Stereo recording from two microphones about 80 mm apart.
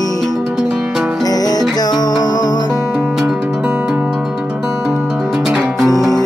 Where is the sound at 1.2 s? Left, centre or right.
Left.